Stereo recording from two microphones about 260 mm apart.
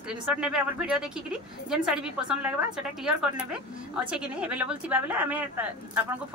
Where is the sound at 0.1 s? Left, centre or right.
Centre.